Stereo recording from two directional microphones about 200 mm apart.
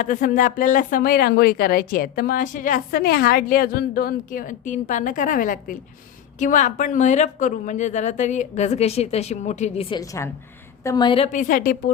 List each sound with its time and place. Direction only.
0.0 s a woman's voice: 40° left (ahead or behind)
10.0 s a woman's voice: 15° left (ahead or behind)
11.3 s speech: 40° left (ahead or behind)